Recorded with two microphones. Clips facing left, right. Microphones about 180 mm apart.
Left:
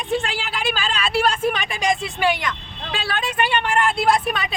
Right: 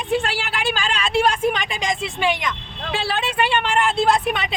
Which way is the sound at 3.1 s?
25° right (ahead or behind).